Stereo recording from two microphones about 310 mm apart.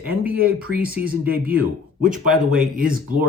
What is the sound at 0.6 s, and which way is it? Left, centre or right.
Speech, right.